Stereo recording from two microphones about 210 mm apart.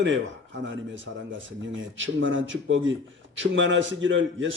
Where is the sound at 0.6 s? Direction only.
60° right (ahead or behind).